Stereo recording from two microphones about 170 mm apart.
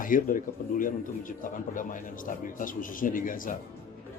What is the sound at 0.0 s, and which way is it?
A man's voice, 55° left (ahead or behind).